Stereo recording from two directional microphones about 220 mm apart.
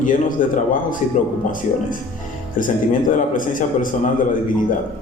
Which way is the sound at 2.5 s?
35° left (ahead or behind).